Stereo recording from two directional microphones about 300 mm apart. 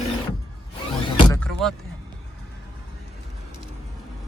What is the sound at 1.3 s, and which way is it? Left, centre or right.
Vehicle, centre.